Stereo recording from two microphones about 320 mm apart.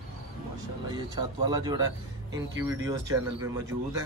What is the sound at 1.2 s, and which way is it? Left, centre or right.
Speech, centre.